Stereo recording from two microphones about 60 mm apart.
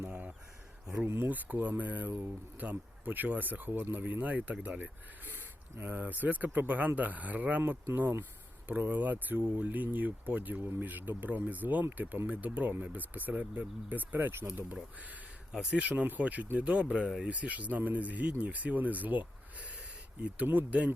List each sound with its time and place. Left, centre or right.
0.1 s a sound: right
1.0 s speech: right
1.3 s speech: right
8.8 s speech: right
15.7 s speech: right
17.2 s speech: right